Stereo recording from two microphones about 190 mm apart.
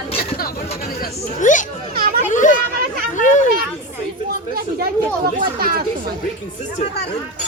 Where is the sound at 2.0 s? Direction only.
50° right (ahead or behind).